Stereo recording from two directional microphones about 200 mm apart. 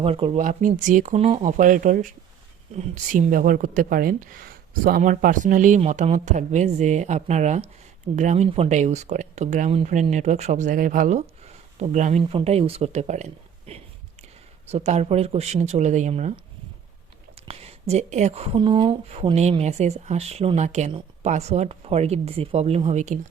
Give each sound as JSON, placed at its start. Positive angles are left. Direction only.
{"t": 0.0, "sound": "speech", "side_deg": -30}
{"t": 17.5, "sound": "speech", "side_deg": -30}